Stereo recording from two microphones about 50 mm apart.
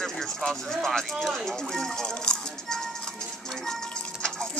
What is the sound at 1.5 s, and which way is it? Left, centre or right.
Music, centre.